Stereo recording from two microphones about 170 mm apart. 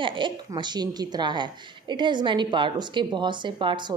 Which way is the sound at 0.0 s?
30° right (ahead or behind).